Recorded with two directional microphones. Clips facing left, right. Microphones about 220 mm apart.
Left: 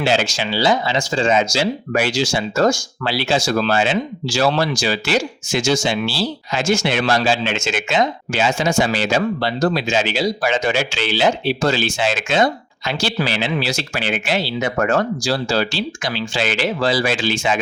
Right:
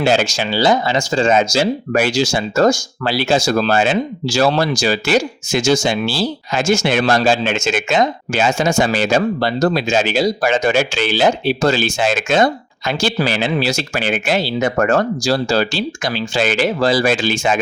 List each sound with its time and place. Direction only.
0.0 s speech: 45° right (ahead or behind)